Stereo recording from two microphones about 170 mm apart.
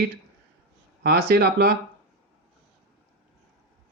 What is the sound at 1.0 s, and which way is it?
Speech, 70° right (ahead or behind).